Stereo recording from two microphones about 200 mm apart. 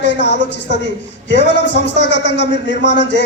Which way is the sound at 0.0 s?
60° left (ahead or behind).